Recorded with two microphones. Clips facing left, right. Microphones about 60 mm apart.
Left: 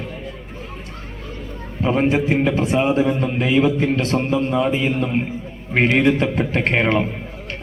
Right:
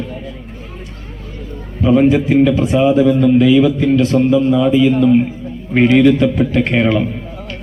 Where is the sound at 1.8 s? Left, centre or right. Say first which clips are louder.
Right 7 dB; left.